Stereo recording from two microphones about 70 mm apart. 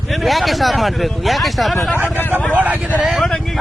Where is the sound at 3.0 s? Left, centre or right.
Centre.